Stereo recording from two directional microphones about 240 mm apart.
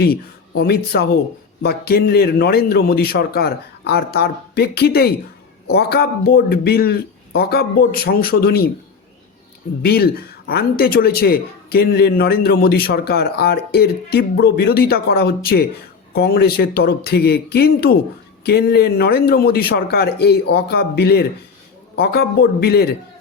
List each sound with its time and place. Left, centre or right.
0.0 s speech: left
9.8 s speech: left